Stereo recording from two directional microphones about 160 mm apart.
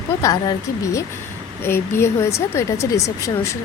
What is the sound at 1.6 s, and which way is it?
Speech, 15° left (ahead or behind).